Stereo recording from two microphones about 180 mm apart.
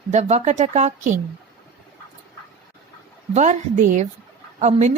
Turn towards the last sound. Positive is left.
turn(degrees=-40)  # may be behind; listen again after turning